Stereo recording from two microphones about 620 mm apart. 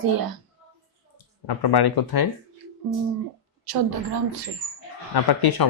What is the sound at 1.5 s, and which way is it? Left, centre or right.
Speech, left.